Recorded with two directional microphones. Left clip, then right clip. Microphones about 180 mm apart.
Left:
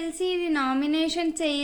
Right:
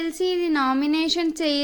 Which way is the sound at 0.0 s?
30° right (ahead or behind).